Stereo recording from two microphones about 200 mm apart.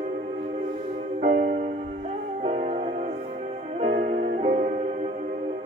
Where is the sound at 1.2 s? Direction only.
40° right (ahead or behind).